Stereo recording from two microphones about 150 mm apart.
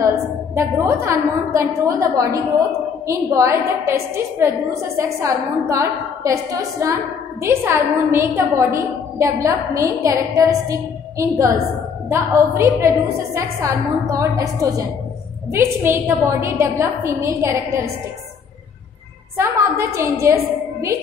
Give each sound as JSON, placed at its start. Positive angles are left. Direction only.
{"t": 0.6, "sound": "a woman's voice", "side_deg": -15}
{"t": 19.3, "sound": "a woman's voice", "side_deg": -20}